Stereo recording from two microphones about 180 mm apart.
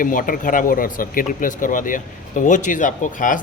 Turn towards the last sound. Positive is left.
turn(degrees=45)  # may be behind; listen again after turning